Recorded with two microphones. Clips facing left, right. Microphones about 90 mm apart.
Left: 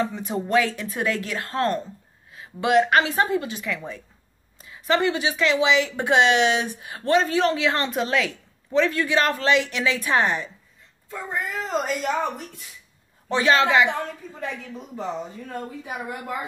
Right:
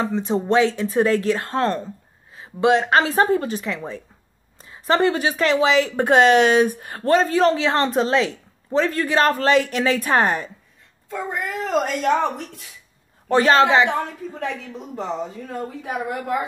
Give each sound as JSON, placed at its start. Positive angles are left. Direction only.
{"t": 0.0, "sound": "speech", "side_deg": -30}
{"t": 11.1, "sound": "a woman's voice", "side_deg": -70}
{"t": 13.3, "sound": "speech", "side_deg": -40}
{"t": 15.8, "sound": "a woman's voice", "side_deg": -90}